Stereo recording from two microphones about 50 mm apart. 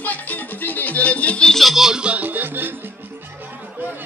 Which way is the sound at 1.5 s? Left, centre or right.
Centre.